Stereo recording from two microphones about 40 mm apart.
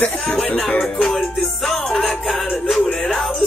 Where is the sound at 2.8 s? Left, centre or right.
Centre.